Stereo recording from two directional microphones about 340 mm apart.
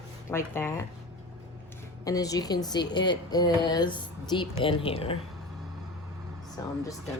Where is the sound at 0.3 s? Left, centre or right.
Centre.